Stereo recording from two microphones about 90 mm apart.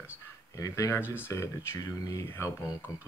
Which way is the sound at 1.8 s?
40° left (ahead or behind).